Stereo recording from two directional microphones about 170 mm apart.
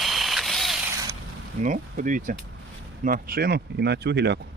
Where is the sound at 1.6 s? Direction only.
50° right (ahead or behind).